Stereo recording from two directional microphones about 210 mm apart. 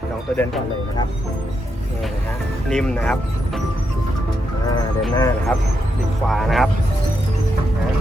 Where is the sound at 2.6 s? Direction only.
5° left (ahead or behind).